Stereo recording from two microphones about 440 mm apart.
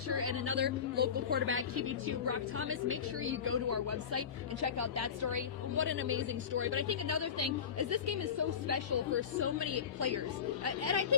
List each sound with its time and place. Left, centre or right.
0.3 s a woman's voice: right
5.7 s a woman's voice: right